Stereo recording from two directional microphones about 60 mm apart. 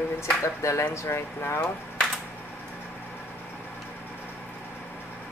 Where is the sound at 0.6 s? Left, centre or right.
Left.